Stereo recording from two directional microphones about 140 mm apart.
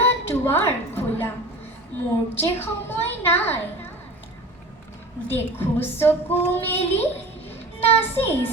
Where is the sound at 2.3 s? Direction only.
15° left (ahead or behind).